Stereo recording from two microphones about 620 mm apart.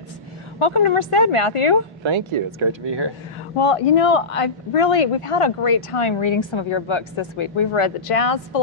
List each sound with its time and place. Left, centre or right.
0.6 s speech: left
2.0 s speech: right
3.5 s speech: left